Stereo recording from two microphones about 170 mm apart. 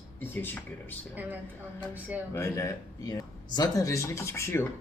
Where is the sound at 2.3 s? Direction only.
20° left (ahead or behind).